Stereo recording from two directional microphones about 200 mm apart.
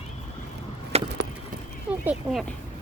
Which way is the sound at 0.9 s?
30° right (ahead or behind).